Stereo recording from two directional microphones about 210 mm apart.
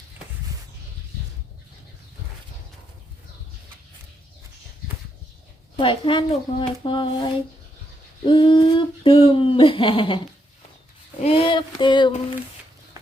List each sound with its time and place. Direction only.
5.7 s speech: 25° left (ahead or behind)
8.2 s speech: 25° left (ahead or behind)
11.2 s speech: 25° left (ahead or behind)